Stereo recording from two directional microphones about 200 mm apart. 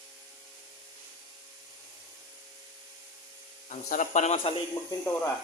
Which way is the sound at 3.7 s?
40° left (ahead or behind).